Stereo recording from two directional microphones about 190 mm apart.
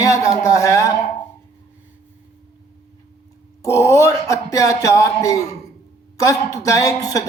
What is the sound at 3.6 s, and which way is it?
A man's voice, 15° left (ahead or behind).